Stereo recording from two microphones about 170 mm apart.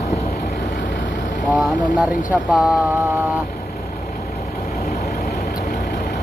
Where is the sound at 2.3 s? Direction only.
5° right (ahead or behind).